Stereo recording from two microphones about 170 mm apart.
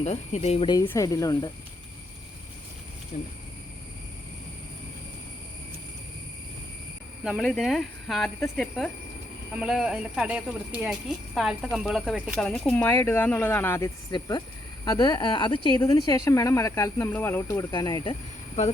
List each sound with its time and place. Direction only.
0.0 s speech: 40° left (ahead or behind)
0.7 s speech: 20° left (ahead or behind)
3.1 s speech: 55° left (ahead or behind)
7.3 s speech: centre (ahead or behind)
12.5 s speech: 5° left (ahead or behind); by 18.7 s 35° left (ahead or behind)